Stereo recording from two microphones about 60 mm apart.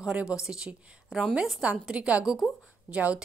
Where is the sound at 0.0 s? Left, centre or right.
Centre.